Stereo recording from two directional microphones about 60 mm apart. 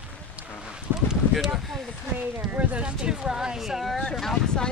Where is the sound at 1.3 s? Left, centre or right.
Centre.